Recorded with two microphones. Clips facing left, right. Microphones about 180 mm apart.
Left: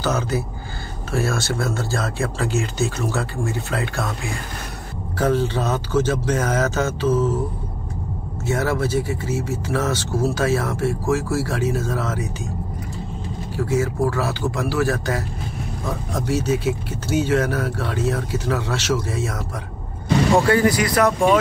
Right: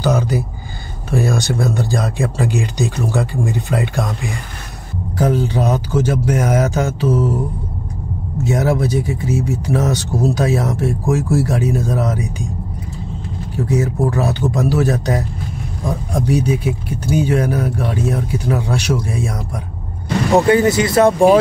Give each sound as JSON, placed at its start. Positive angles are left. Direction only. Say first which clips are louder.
{"t": 0.0, "sound": "speech", "louder": "right 5 dB", "side_deg": -15}
{"t": 5.1, "sound": "speech", "louder": "right 3 dB", "side_deg": -15}
{"t": 8.5, "sound": "speech", "louder": "right 4 dB", "side_deg": -15}
{"t": 13.6, "sound": "speech", "louder": "right 3 dB", "side_deg": -15}
{"t": 20.3, "sound": "speech", "louder": "right 7 dB", "side_deg": -20}